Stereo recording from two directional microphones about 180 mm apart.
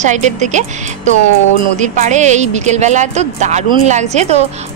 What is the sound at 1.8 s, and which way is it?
A woman's voice, 40° right (ahead or behind).